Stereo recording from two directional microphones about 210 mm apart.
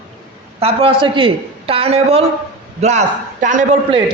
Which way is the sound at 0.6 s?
25° right (ahead or behind).